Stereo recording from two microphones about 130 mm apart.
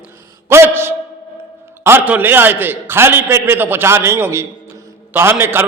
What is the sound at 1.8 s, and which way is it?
A man's voice, 15° right (ahead or behind).